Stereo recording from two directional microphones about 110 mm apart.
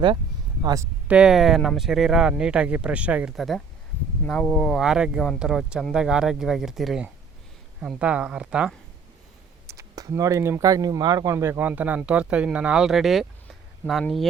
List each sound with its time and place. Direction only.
0.6 s speech: 30° right (ahead or behind)
1.0 s speech: 10° right (ahead or behind)
3.3 s speech: centre (ahead or behind)
9.6 s speech: 30° right (ahead or behind); by 14.0 s centre (ahead or behind)